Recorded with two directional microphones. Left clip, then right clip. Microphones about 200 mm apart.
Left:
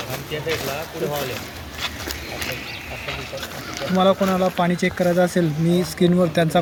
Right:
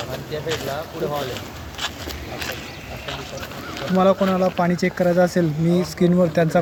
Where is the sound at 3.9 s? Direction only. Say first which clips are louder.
Even; 10° right (ahead or behind).